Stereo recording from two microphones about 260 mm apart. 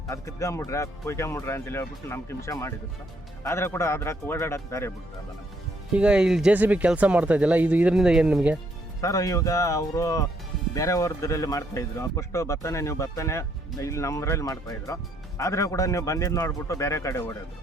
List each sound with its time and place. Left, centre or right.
0.1 s speech: centre
5.9 s speech: centre
9.0 s speech: centre